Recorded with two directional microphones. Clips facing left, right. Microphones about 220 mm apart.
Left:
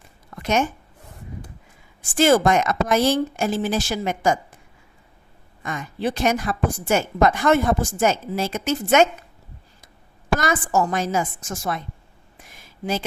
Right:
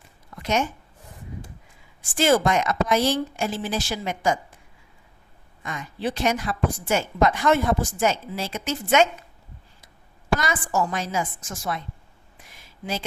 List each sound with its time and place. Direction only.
2.1 s a woman's voice: 45° left (ahead or behind)
5.6 s a woman's voice: 50° left (ahead or behind)
10.4 s a woman's voice: 45° left (ahead or behind)
12.5 s a sound: 45° left (ahead or behind)